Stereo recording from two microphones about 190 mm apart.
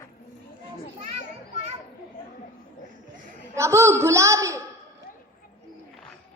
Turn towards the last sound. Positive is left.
turn(degrees=-15)  # may be behind; listen again after turning